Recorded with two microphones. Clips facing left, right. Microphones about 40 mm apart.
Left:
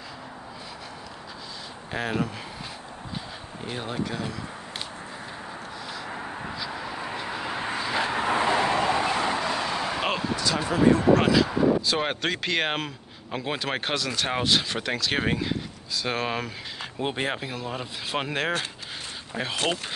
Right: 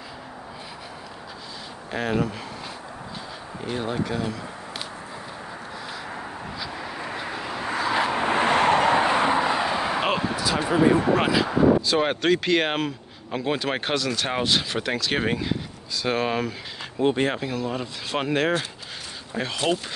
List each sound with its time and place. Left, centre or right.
1.9 s speech: centre
3.6 s speech: centre
6.0 s vehicle: centre
7.4 s vehicle: centre
7.7 s vehicle: centre
8.0 s vehicle: right
9.0 s vehicle: right; by 10.0 s centre
10.0 s speech: centre
11.8 s speech: centre
19.4 s speech: left